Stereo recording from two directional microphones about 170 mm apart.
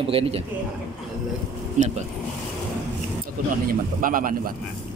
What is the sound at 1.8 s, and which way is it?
Speech, 50° right (ahead or behind).